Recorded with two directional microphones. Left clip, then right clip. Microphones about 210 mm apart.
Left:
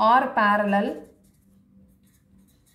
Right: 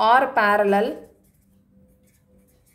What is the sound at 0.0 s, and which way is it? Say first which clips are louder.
Speech: right 2 dB; 50° right (ahead or behind).